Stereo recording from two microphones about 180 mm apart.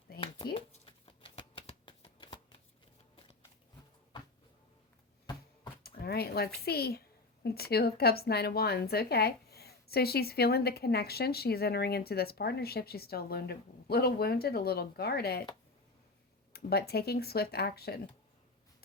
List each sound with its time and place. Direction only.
0.5 s shuffling cards: 30° left (ahead or behind)
5.8 s a sound: 60° left (ahead or behind)
6.7 s a woman's voice: 60° left (ahead or behind)
16.5 s a woman's voice: 60° left (ahead or behind)